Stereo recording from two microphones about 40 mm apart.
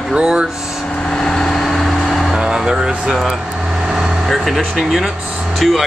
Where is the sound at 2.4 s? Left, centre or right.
Centre.